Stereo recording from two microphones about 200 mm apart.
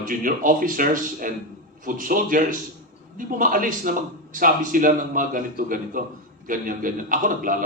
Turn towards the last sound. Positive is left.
turn(degrees=-40)  # may be behind; listen again after turning